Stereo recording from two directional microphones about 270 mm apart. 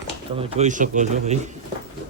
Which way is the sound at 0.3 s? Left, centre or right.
Right.